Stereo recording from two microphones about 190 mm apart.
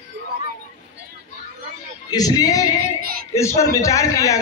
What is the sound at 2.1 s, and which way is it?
Speech, 20° left (ahead or behind).